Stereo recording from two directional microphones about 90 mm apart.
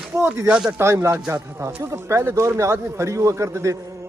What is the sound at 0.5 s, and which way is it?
Speech, 10° right (ahead or behind).